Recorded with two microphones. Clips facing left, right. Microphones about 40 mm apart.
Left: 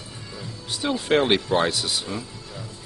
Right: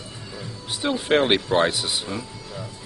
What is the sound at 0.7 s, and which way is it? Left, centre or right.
Speech, centre.